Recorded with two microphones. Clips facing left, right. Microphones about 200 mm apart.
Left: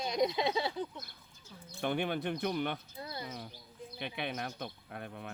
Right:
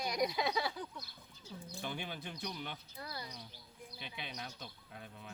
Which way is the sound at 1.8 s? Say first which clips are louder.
Left 11 dB; 60° left (ahead or behind).